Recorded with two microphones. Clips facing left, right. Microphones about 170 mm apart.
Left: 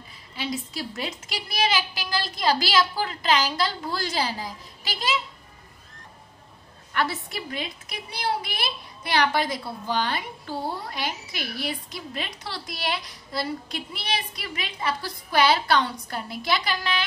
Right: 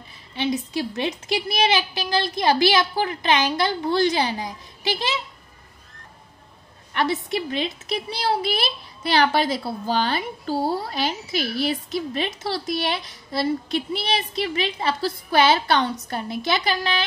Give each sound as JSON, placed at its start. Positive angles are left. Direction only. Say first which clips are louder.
{"t": 0.4, "sound": "a woman's voice", "louder": "right 7 dB", "side_deg": -25}
{"t": 6.9, "sound": "a woman's voice", "louder": "right 5 dB", "side_deg": -20}